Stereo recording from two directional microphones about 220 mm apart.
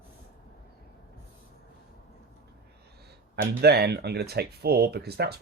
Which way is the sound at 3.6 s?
45° right (ahead or behind).